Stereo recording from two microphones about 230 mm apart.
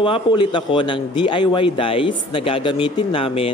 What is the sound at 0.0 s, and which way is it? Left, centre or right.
A man's voice, left.